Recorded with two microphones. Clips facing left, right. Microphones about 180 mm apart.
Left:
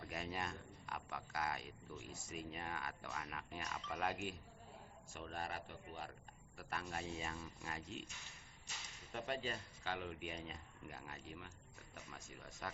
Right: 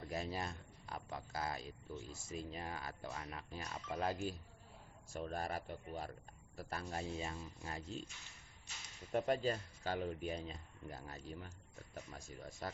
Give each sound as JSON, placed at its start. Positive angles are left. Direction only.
{"t": 0.0, "sound": "speech", "side_deg": -30}
{"t": 9.1, "sound": "speech", "side_deg": -40}